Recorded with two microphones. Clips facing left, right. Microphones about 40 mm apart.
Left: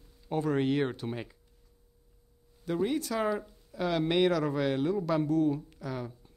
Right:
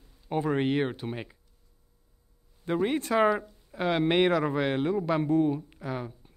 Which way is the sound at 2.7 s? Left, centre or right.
Right.